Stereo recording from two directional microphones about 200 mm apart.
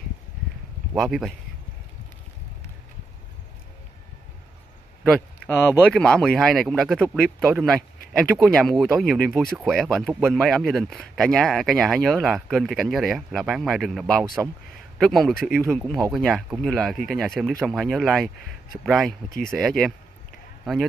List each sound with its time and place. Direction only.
0.9 s speech: centre (ahead or behind)
5.0 s a sound: centre (ahead or behind)
5.5 s speech: 10° left (ahead or behind)
19.2 s speech: 45° left (ahead or behind)
19.5 s speech: centre (ahead or behind)